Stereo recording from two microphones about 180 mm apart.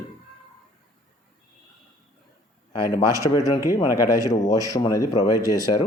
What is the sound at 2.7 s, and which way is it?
Speech, 20° left (ahead or behind).